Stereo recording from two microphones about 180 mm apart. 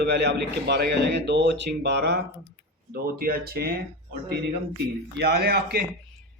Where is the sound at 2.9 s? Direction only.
55° right (ahead or behind).